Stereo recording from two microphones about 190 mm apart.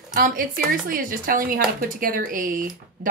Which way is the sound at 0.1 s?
45° right (ahead or behind).